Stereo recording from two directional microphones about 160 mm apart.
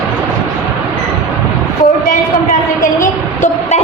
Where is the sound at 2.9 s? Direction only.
50° left (ahead or behind).